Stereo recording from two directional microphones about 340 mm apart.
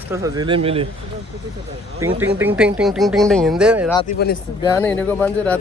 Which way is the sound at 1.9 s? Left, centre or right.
Centre.